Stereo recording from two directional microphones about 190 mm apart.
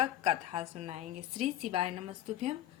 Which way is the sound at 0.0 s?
35° right (ahead or behind).